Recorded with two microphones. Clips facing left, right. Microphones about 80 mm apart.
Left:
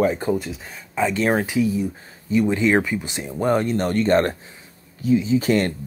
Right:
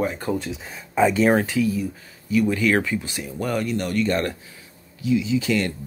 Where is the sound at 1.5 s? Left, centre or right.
Left.